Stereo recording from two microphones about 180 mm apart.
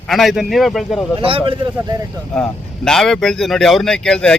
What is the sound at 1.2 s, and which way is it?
Speech, 30° right (ahead or behind).